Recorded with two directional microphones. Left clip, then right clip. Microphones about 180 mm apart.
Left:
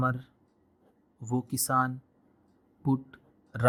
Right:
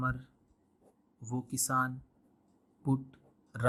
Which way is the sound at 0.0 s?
25° left (ahead or behind).